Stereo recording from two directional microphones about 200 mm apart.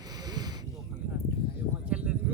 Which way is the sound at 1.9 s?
5° right (ahead or behind).